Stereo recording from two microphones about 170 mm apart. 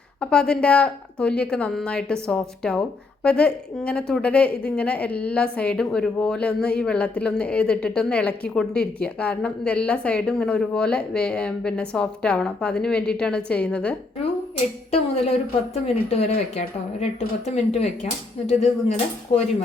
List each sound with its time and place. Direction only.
0.2 s a woman's voice: 5° left (ahead or behind)
14.8 s speech: 35° left (ahead or behind)